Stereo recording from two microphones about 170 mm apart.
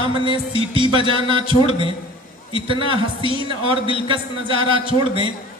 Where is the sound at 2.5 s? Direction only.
30° right (ahead or behind).